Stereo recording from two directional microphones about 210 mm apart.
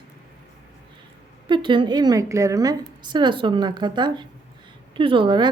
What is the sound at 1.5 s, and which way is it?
A woman's voice, 25° right (ahead or behind).